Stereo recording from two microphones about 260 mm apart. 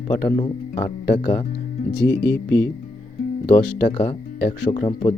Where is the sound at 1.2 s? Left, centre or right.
Centre.